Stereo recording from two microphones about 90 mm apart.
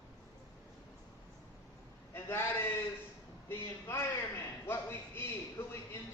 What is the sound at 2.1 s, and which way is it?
A man's voice, 25° left (ahead or behind).